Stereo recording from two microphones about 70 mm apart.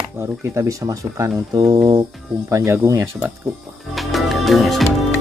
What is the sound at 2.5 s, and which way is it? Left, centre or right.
Speech, right.